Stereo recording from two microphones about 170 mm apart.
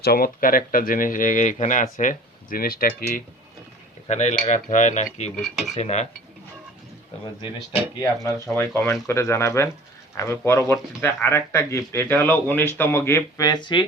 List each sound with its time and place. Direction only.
0.0 s speech: 60° left (ahead or behind)
4.1 s speech: 40° left (ahead or behind)
5.4 s cutlery: centre (ahead or behind)
5.7 s cutlery: 40° left (ahead or behind)
8.0 s speech: 20° left (ahead or behind)